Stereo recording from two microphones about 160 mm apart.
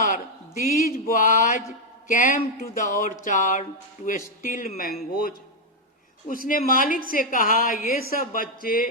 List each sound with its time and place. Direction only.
0.1 s a woman's voice: 60° left (ahead or behind)
6.2 s a woman's voice: 60° left (ahead or behind)